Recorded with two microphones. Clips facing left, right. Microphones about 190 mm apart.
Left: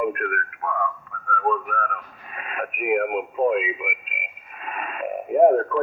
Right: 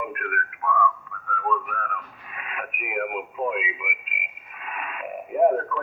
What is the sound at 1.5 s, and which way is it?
Radio, 35° left (ahead or behind).